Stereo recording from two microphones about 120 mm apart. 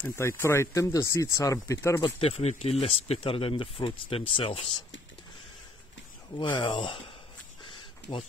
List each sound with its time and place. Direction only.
0.0 s speech: 20° left (ahead or behind)
2.0 s speech: 40° left (ahead or behind)
2.2 s speech: 60° left (ahead or behind)
6.5 s speech: 40° left (ahead or behind)
7.6 s a sound: 45° left (ahead or behind)